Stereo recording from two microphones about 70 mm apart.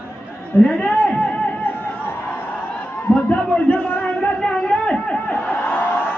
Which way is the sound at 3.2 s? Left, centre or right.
Left.